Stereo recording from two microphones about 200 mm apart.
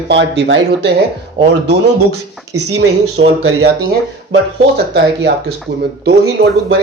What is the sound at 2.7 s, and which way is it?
Speech, 85° right.